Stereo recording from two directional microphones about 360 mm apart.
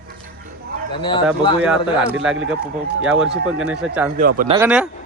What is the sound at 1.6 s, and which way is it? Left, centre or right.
A man's voice, centre.